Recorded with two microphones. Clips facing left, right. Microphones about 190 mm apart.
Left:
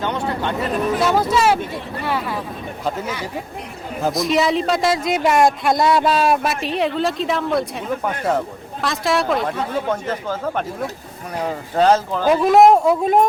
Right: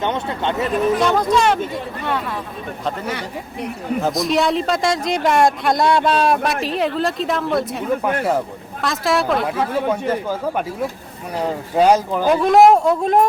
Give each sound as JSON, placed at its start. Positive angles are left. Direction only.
{"t": 0.0, "sound": "speech", "side_deg": -20}
{"t": 0.9, "sound": "a man's voice", "side_deg": 5}
{"t": 4.0, "sound": "a man's voice", "side_deg": 0}
{"t": 11.8, "sound": "a man's voice", "side_deg": -10}
{"t": 12.3, "sound": "a man's voice", "side_deg": 0}